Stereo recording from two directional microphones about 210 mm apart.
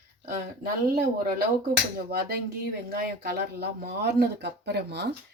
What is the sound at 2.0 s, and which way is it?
Speech, 45° right (ahead or behind).